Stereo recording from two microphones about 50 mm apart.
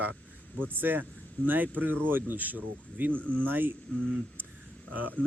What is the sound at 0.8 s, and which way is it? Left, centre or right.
Speech, right.